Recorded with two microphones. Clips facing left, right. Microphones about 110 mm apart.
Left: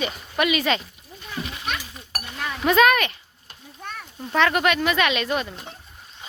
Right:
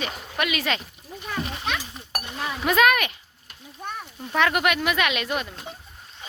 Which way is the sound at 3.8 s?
15° right (ahead or behind).